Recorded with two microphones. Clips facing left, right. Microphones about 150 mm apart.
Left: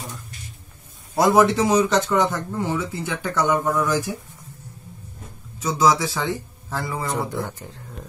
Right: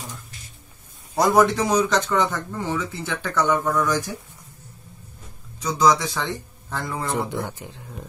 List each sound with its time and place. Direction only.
1.1 s speech: 5° left (ahead or behind)
5.6 s speech: 5° left (ahead or behind)
7.4 s speech: 20° right (ahead or behind)